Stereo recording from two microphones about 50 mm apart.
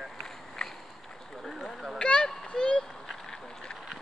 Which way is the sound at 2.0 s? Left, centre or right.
Centre.